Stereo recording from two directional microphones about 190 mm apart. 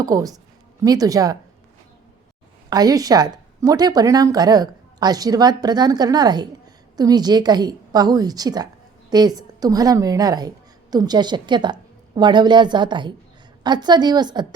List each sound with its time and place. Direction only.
0.0 s speech: 20° right (ahead or behind)
2.6 s speech: 20° right (ahead or behind)